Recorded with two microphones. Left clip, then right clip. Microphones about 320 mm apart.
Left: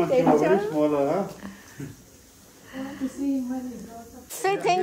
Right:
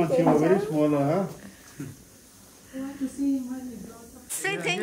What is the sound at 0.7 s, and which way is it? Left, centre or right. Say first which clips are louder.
Speech: left 1 dB; right.